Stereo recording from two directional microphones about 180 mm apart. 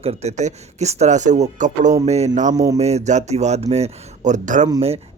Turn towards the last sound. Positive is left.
turn(degrees=-35)  # may be behind; listen again after turning